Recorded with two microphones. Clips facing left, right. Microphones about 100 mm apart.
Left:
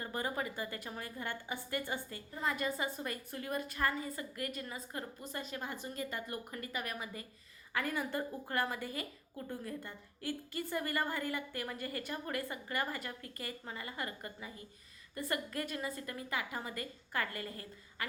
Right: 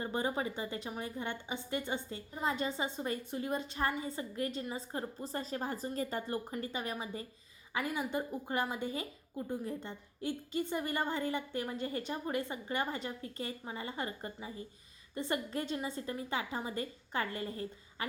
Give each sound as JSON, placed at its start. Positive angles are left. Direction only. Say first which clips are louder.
{"t": 0.0, "sound": "a woman's voice", "louder": "right 3 dB", "side_deg": -25}
{"t": 7.7, "sound": "a woman's voice", "louder": "right 1 dB", "side_deg": -15}